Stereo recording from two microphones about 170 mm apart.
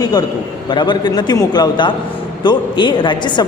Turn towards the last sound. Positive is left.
turn(degrees=25)  # may be behind; listen again after turning